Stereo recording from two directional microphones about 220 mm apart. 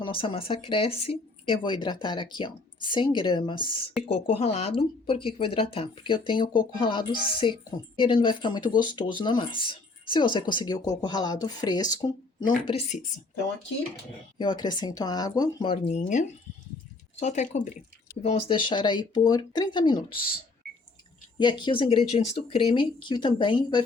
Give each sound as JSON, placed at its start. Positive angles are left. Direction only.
{"t": 0.0, "sound": "speech", "side_deg": 25}
{"t": 14.3, "sound": "speech", "side_deg": 20}
{"t": 21.3, "sound": "speech", "side_deg": 20}